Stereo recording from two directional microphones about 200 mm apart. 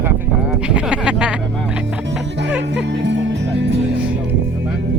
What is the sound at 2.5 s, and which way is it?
Speech, 60° right (ahead or behind).